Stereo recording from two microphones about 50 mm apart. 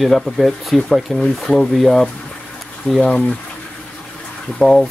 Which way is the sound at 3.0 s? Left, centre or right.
Centre.